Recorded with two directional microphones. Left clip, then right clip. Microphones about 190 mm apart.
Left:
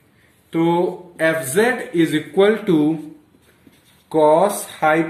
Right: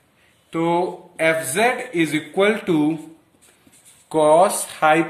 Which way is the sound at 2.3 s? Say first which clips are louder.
Left 3 dB; 45° right (ahead or behind).